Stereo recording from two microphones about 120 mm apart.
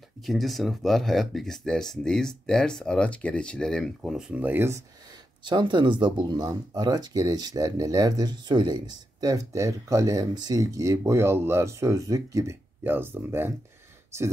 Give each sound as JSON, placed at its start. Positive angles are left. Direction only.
{"t": 0.2, "sound": "speech", "side_deg": 0}
{"t": 5.4, "sound": "speech", "side_deg": -40}